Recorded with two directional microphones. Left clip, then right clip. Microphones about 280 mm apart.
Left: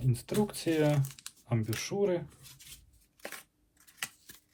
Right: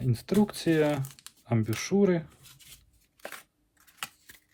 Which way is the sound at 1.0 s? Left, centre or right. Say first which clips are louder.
Left 1 dB; centre.